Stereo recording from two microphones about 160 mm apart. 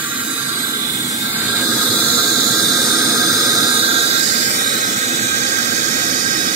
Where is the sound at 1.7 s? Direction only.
25° right (ahead or behind).